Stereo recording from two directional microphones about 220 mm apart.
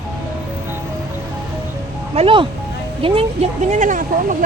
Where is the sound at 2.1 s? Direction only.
25° right (ahead or behind).